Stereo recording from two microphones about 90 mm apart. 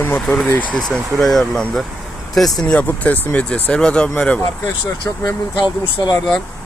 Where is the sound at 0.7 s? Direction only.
5° left (ahead or behind).